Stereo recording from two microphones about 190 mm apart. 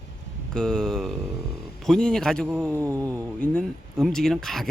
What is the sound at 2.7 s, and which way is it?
Mantra, 15° right (ahead or behind).